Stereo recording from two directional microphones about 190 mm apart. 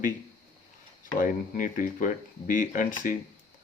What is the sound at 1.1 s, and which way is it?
Speech, 45° left (ahead or behind).